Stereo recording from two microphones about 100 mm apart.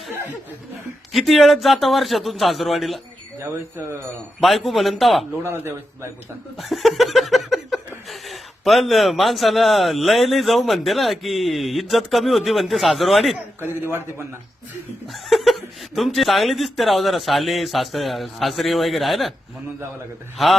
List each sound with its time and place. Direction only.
1.1 s speech: centre (ahead or behind)
4.4 s speech: centre (ahead or behind)
5.4 s a man's voice: 25° right (ahead or behind)
6.6 s speech: centre (ahead or behind)
13.6 s a man's voice: 20° right (ahead or behind)
15.0 s speech: centre (ahead or behind)